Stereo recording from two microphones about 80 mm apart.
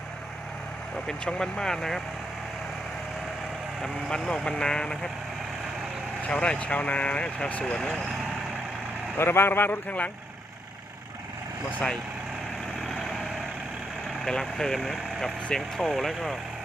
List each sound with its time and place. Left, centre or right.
1.0 s speech: centre
3.8 s speech: centre
6.2 s speech: centre
9.1 s speech: left
12.8 s vehicle: centre
14.3 s speech: centre